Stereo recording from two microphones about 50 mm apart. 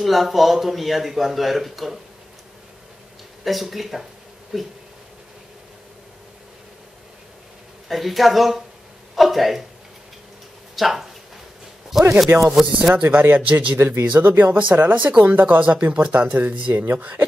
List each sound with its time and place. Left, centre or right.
0.0 s a man's voice: centre
3.4 s a man's voice: centre
7.9 s a man's voice: centre
10.8 s a man's voice: centre
12.3 s speech: right
12.9 s speech: right
13.7 s speech: right